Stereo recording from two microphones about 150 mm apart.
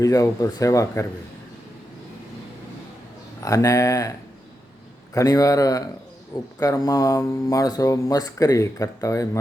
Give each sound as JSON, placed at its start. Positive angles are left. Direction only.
{"t": 0.0, "sound": "speech", "side_deg": 25}
{"t": 3.4, "sound": "speech", "side_deg": 20}
{"t": 5.1, "sound": "speech", "side_deg": 25}